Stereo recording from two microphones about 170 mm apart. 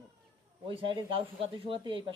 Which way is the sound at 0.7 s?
30° right (ahead or behind).